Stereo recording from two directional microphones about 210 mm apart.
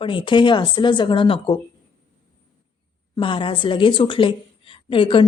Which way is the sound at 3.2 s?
25° left (ahead or behind).